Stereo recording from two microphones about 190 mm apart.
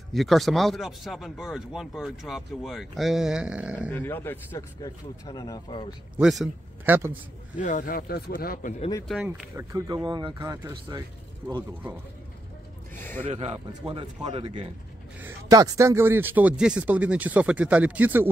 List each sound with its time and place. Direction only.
0.1 s speech: centre (ahead or behind)
3.9 s a man's voice: 10° left (ahead or behind)
6.1 s a man's voice: centre (ahead or behind)
7.5 s speech: 40° left (ahead or behind)
9.0 s speech: centre (ahead or behind)
9.6 s speech: 20° right (ahead or behind)
12.9 s speech: 10° left (ahead or behind)
13.3 s a man's voice: 30° right (ahead or behind)
15.1 s speech: 15° right (ahead or behind)